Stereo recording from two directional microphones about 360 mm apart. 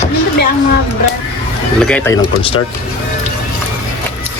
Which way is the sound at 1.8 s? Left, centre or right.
Centre.